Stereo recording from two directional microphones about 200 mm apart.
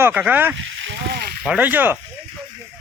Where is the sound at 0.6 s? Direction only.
70° right (ahead or behind).